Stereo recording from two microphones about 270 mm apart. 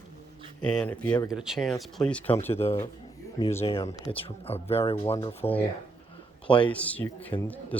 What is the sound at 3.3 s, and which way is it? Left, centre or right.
Speech, centre.